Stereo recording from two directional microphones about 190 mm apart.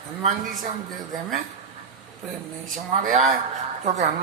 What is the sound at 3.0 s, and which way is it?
Music, 40° right (ahead or behind).